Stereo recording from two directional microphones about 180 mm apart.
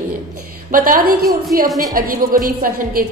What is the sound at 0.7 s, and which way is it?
A woman's voice, 50° right (ahead or behind).